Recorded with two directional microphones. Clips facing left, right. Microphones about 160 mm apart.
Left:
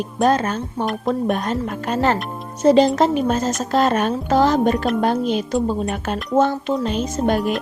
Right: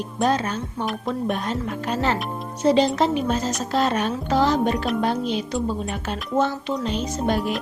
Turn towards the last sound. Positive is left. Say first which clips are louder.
# left 4 dB
turn(degrees=50)  # may be behind; listen again after turning